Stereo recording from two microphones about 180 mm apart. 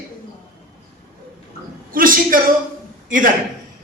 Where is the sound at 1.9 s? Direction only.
50° right (ahead or behind).